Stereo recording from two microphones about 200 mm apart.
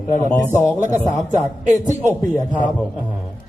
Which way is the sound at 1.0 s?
15° left (ahead or behind).